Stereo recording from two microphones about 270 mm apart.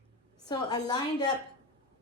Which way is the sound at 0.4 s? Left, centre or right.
Centre.